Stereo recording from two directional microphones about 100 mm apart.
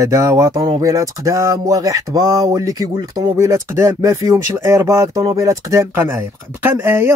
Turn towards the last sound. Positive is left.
turn(degrees=-20)  # may be behind; listen again after turning